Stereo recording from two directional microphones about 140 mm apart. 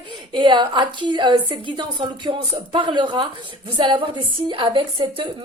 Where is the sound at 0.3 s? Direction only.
35° right (ahead or behind).